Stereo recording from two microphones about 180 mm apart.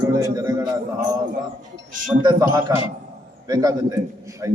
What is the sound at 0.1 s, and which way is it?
Speech, 20° right (ahead or behind).